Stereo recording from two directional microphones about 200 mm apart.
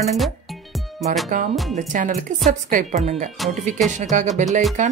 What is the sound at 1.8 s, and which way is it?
Music, 40° right (ahead or behind).